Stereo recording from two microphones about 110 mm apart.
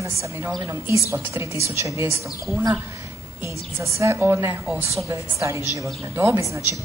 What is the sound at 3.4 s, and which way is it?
A woman's voice, 25° right (ahead or behind).